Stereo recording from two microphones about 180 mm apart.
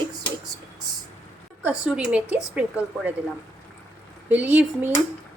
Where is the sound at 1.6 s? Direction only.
5° right (ahead or behind).